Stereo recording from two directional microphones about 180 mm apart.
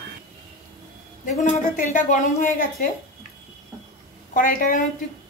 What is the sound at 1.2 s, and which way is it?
A woman's voice, 45° left (ahead or behind).